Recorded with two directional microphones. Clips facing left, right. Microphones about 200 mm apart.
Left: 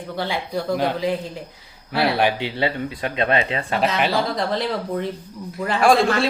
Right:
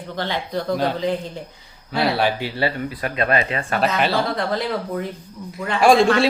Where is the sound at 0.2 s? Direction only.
10° left (ahead or behind).